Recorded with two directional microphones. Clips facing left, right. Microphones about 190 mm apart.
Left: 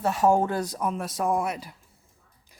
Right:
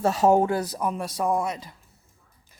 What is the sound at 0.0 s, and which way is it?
Speech, 30° right (ahead or behind).